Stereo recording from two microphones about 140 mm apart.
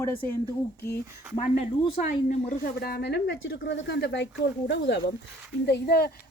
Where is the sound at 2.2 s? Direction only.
80° left.